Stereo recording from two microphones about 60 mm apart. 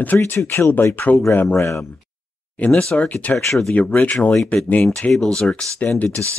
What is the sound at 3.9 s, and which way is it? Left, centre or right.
Speech, left.